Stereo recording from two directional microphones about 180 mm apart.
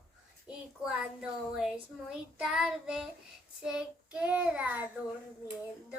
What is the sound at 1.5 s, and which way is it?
Child singing, 5° right (ahead or behind).